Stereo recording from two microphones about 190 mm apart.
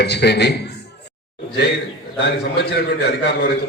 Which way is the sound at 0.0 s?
60° left (ahead or behind).